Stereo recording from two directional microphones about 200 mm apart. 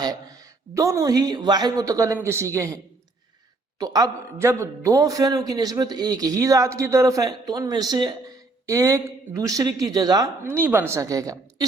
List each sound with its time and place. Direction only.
0.0 s speech: 20° right (ahead or behind)
3.8 s speech: 20° right (ahead or behind)